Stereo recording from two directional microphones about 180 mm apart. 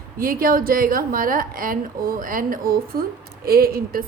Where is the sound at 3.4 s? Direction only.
55° right (ahead or behind).